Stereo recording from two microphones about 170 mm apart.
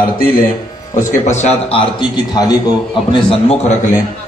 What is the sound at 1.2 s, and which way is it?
Speech, 45° left (ahead or behind).